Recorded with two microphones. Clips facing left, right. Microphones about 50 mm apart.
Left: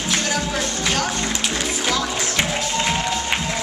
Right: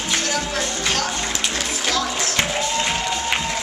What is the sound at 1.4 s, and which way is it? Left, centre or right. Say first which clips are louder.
Music: left 1 dB; centre.